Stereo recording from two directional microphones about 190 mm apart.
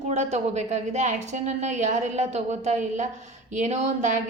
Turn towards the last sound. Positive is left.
turn(degrees=-35)  # may be behind; listen again after turning